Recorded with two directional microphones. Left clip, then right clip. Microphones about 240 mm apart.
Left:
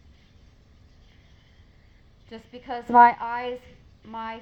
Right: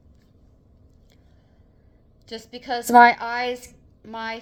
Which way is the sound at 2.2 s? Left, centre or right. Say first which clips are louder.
Right 5 dB; right.